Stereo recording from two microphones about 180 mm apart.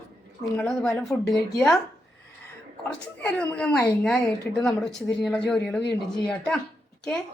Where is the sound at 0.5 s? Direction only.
5° left (ahead or behind).